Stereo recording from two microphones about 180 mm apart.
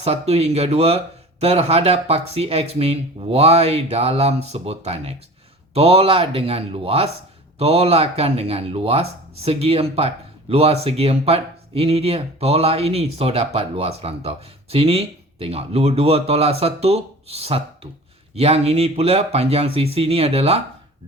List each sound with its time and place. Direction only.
0.0 s speech: 35° right (ahead or behind)